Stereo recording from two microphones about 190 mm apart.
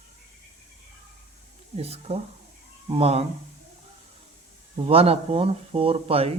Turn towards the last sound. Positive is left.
turn(degrees=-30)  # may be behind; listen again after turning